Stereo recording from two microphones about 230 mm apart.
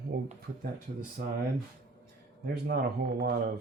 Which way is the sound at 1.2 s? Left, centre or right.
Right.